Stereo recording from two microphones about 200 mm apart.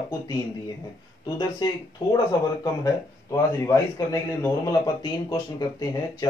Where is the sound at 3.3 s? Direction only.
15° left (ahead or behind).